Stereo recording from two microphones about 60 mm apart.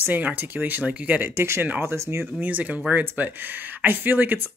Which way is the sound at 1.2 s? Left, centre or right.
Right.